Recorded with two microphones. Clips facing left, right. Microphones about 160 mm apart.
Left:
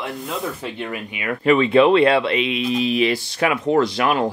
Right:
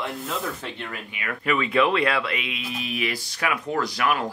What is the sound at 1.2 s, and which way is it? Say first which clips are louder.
Speech: left 9 dB; 25° left (ahead or behind).